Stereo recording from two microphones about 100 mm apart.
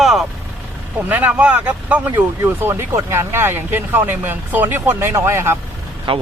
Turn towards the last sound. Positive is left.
turn(degrees=-65)  # may be behind; listen again after turning